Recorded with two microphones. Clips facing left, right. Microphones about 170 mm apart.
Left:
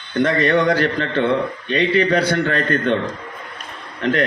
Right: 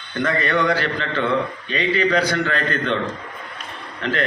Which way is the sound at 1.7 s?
65° left (ahead or behind).